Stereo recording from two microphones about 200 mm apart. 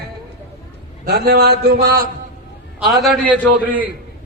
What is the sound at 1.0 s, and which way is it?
A man's voice, 55° right (ahead or behind).